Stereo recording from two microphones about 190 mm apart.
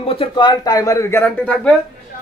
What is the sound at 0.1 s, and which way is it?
Speech, 25° left (ahead or behind).